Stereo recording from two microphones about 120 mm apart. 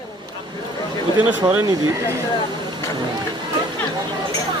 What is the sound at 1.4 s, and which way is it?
Speech, 25° right (ahead or behind).